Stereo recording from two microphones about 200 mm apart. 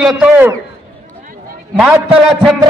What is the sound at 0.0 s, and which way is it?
Speech, 5° right (ahead or behind).